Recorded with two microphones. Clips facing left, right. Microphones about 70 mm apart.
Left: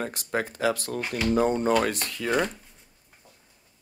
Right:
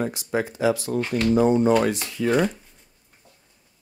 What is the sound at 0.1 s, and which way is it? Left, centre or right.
Speech, left.